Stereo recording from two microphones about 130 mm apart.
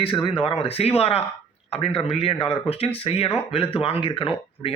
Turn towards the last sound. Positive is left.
turn(degrees=45)  # may be behind; listen again after turning